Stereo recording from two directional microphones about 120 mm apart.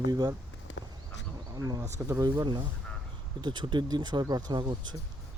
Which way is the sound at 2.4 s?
40° right (ahead or behind).